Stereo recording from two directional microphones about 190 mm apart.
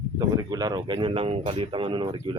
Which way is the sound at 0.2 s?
20° right (ahead or behind).